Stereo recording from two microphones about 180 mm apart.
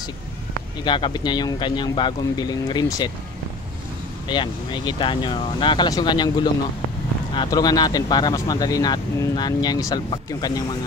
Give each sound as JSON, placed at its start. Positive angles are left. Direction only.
{"t": 0.8, "sound": "speech", "side_deg": 25}
{"t": 4.3, "sound": "speech", "side_deg": 25}